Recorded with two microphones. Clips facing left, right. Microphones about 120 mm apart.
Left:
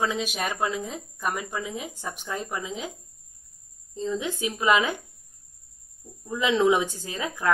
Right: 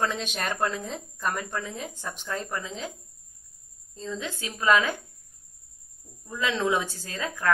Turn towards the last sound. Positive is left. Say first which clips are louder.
# left 1 dB
turn(degrees=15)  # may be behind; listen again after turning